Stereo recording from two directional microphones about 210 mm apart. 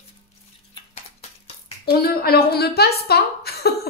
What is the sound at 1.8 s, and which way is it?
A woman's voice, 50° left (ahead or behind).